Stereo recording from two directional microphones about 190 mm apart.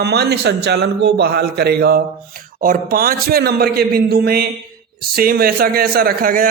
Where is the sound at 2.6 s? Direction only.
45° right (ahead or behind).